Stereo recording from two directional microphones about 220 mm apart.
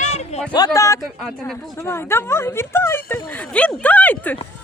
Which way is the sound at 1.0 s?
Centre (ahead or behind).